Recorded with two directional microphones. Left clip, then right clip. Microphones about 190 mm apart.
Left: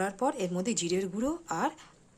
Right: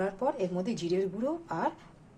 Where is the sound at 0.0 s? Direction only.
35° left (ahead or behind).